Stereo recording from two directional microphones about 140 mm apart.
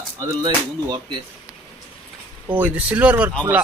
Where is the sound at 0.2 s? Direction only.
30° right (ahead or behind).